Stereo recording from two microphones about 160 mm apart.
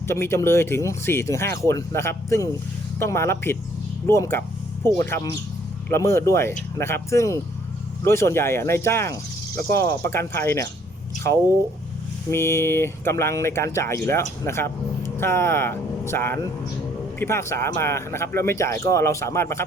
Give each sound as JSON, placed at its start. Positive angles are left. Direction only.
{"t": 0.1, "sound": "speech", "side_deg": 15}
{"t": 12.3, "sound": "speech", "side_deg": 15}